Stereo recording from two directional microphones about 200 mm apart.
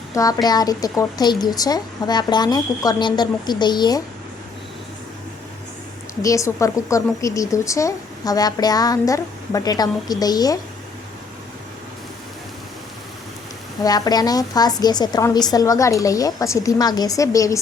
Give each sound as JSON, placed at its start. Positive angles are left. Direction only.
{"t": 0.1, "sound": "a woman's voice", "side_deg": 15}
{"t": 6.2, "sound": "a woman's voice", "side_deg": 15}
{"t": 13.8, "sound": "a woman's voice", "side_deg": 20}